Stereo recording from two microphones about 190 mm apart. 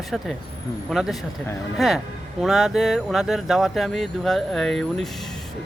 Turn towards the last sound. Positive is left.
turn(degrees=0)  # may be behind; listen again after turning